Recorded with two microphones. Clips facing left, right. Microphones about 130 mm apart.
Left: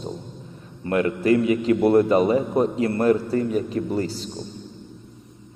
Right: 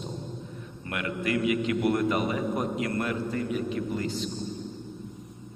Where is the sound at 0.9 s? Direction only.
35° left (ahead or behind).